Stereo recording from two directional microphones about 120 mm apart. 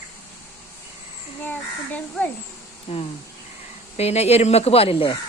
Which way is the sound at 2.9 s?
60° left (ahead or behind).